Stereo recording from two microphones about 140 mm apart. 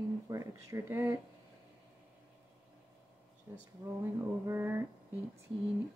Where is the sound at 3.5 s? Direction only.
15° right (ahead or behind).